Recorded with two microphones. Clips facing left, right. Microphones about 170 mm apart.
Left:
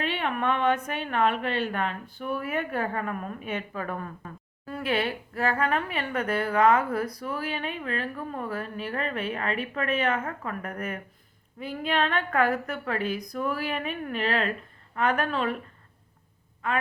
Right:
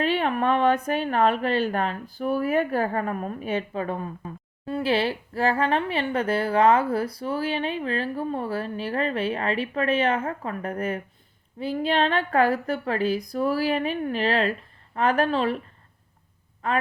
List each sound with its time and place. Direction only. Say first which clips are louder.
0.0 s a woman's voice: right 5 dB; 35° right (ahead or behind)
16.6 s a woman's voice: right 3 dB; 35° right (ahead or behind)